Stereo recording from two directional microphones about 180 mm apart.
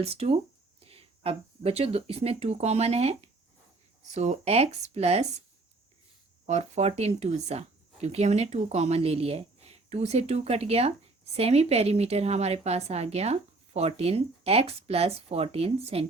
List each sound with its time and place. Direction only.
0.0 s a woman's voice: 35° right (ahead or behind)
6.4 s a woman's voice: 35° right (ahead or behind)